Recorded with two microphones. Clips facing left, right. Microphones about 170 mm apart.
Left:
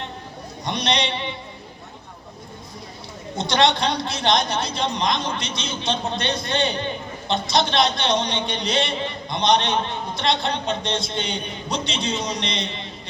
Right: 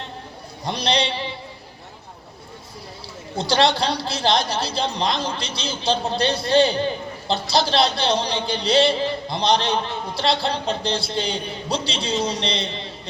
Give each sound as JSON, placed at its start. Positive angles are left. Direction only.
{"t": 0.6, "sound": "a man's voice", "side_deg": -30}
{"t": 3.3, "sound": "a man's voice", "side_deg": -30}